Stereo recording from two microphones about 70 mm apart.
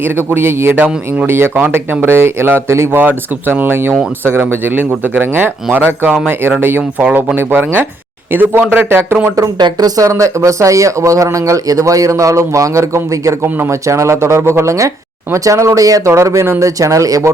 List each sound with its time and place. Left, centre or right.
0.3 s a man's voice: right
9.6 s speech: right
10.0 s speech: right